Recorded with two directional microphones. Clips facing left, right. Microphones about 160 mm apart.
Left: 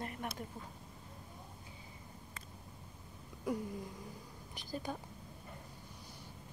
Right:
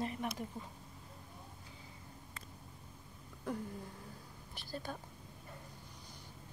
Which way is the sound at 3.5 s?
10° left (ahead or behind).